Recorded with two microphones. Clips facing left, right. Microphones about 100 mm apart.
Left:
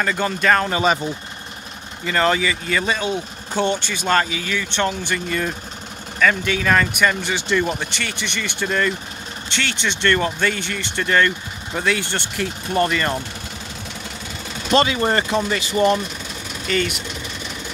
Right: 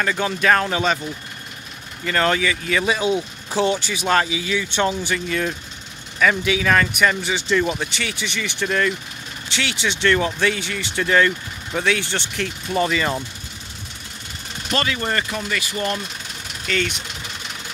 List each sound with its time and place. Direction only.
0.0 s speech: centre (ahead or behind)
2.0 s speech: centre (ahead or behind)
14.7 s speech: 25° left (ahead or behind)
16.7 s speech: 5° left (ahead or behind)